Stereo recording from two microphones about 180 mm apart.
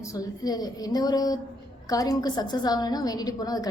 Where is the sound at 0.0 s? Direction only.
20° left (ahead or behind).